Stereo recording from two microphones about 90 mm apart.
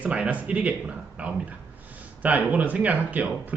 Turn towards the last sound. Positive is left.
turn(degrees=-15)  # may be behind; listen again after turning